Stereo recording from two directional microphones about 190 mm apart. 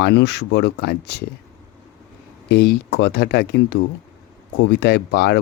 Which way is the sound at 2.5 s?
60° left (ahead or behind).